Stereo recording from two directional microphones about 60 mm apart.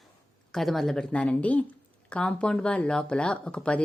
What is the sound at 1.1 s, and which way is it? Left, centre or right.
A woman's voice, left.